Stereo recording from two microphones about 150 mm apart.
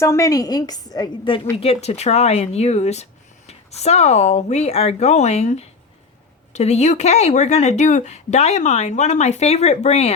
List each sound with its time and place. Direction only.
0.0 s a woman's voice: 20° left (ahead or behind)
1.5 s speech: 45° left (ahead or behind)